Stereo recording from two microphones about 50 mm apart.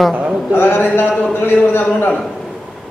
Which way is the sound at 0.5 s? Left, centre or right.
Left.